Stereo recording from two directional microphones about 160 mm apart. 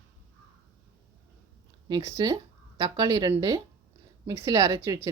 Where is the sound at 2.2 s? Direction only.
25° right (ahead or behind).